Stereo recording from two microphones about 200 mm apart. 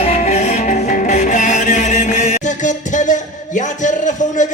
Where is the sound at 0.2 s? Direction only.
35° left (ahead or behind).